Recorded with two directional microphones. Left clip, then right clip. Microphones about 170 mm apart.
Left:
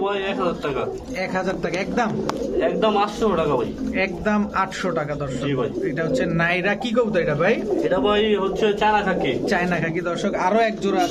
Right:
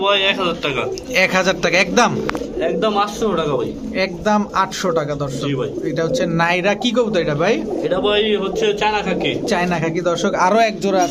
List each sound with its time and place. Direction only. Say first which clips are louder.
0.0 s a man's voice: right 7 dB; 10° right (ahead or behind)
1.1 s speech: right 11 dB; 20° right (ahead or behind)
3.9 s a man's voice: right 5 dB; 30° right (ahead or behind)
6.0 s a man's voice: right 5 dB; 30° right (ahead or behind)
7.9 s a man's voice: right 3 dB; 5° right (ahead or behind)
9.5 s speech: right 3 dB; 25° right (ahead or behind)